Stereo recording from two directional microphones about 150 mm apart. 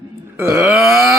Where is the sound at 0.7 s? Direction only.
Centre (ahead or behind).